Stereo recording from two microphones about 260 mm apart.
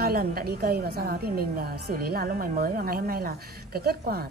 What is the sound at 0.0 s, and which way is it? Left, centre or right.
Speech, right.